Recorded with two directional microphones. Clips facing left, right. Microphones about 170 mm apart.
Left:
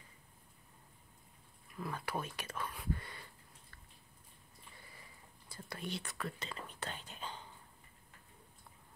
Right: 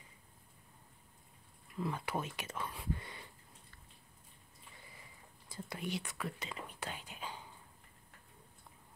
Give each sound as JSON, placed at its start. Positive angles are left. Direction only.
{"t": 1.8, "sound": "speech", "side_deg": -20}
{"t": 5.5, "sound": "speech", "side_deg": -20}